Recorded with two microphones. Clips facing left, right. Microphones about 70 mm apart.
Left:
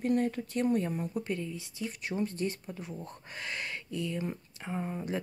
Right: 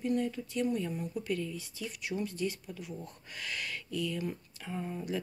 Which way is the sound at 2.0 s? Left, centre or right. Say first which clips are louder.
Left 1 dB; left.